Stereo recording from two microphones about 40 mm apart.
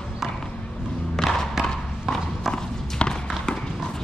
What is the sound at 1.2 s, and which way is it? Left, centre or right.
Thump, centre.